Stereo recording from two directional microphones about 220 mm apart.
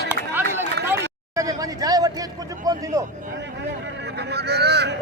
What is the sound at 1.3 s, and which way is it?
Speech, 15° right (ahead or behind).